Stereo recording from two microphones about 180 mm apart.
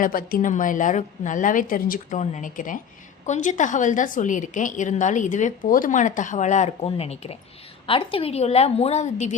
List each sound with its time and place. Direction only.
0.0 s a woman's voice: 50° left (ahead or behind)